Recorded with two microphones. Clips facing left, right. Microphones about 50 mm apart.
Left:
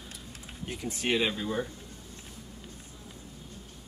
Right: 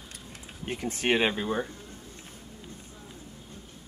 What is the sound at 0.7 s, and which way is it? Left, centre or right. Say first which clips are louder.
Speech: right 4 dB; right.